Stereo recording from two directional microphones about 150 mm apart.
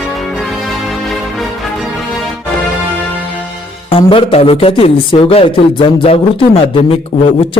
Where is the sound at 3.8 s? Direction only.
35° left (ahead or behind).